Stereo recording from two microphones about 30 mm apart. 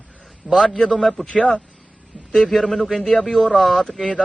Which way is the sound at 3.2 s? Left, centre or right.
Left.